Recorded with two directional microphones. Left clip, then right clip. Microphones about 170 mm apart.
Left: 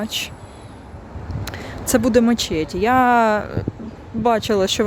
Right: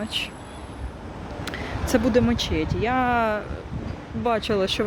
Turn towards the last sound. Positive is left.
turn(degrees=30)  # may be behind; listen again after turning